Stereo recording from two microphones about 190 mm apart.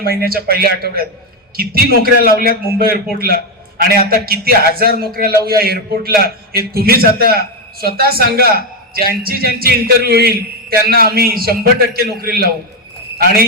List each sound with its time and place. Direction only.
0.0 s a man's voice: 50° right (ahead or behind)